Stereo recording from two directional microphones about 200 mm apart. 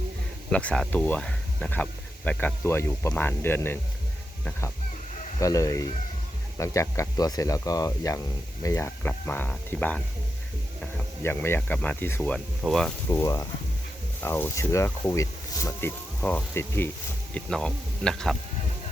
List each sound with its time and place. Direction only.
0.5 s speech: 5° left (ahead or behind)
5.4 s speech: 15° left (ahead or behind)
13.1 s speech: 15° left (ahead or behind)